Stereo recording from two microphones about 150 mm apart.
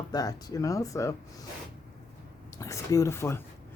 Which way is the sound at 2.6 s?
20° left (ahead or behind).